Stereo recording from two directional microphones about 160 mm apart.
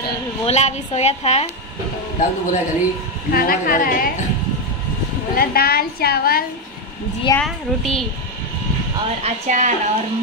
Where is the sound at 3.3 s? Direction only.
65° left (ahead or behind).